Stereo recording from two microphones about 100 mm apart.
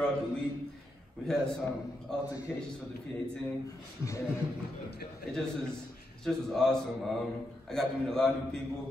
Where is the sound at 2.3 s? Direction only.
35° left (ahead or behind).